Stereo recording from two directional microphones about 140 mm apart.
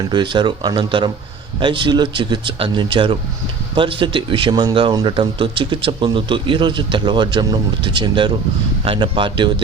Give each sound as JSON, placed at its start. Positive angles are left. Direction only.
{"t": 0.1, "sound": "speech", "side_deg": -35}